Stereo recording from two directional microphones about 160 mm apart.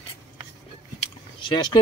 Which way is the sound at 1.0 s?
30° left (ahead or behind).